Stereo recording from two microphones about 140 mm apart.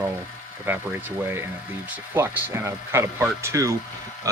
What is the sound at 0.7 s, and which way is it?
Speech, 15° right (ahead or behind).